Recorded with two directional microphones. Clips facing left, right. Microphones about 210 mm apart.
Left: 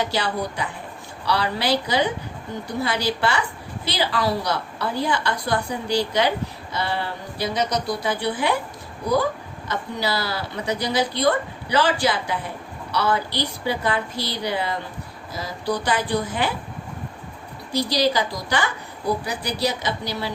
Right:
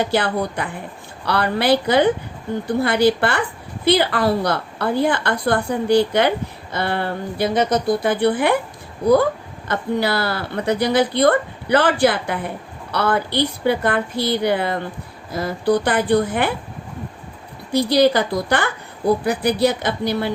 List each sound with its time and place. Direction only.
0.0 s a woman's voice: 55° right (ahead or behind)
9.6 s a woman's voice: 55° right (ahead or behind)
17.7 s a woman's voice: 55° right (ahead or behind)